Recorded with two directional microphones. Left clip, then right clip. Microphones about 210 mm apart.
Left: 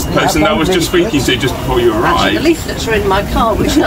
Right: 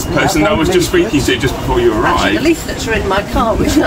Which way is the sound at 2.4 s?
30° right (ahead or behind).